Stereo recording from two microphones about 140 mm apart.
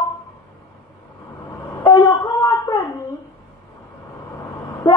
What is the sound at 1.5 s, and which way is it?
Vehicle, 10° left (ahead or behind).